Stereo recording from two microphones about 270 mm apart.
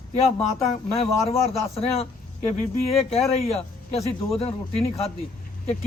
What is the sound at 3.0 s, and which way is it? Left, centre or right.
A man's voice, left.